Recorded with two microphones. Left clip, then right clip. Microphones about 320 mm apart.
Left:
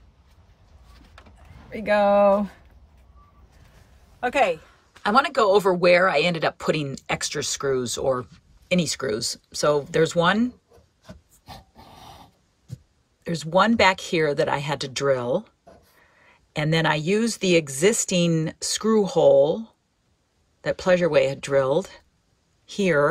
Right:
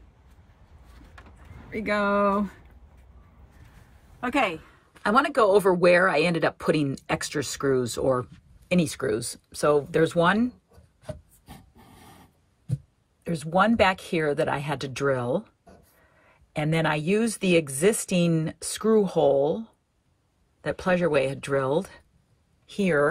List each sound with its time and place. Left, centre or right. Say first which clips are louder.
1.7 s speech: left 6 dB; left
4.2 s a woman's voice: left 4 dB; left
4.6 s speech: right 2 dB; centre
13.2 s speech: left 3 dB; centre